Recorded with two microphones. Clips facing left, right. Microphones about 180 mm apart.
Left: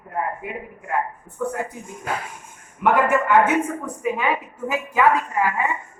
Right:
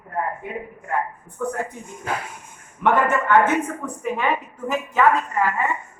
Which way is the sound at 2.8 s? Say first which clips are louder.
Left 1 dB; 10° left (ahead or behind).